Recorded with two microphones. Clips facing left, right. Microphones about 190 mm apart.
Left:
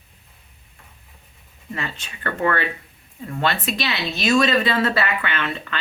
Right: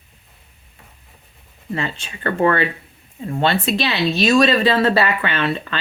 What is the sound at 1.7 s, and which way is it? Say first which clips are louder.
Speech: right 5 dB; 30° right (ahead or behind).